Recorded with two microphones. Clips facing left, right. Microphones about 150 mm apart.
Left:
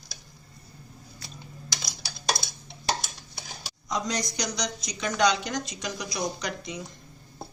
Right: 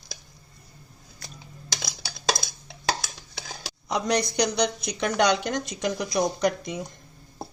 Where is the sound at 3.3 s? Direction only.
75° right (ahead or behind); by 6.8 s 50° right (ahead or behind).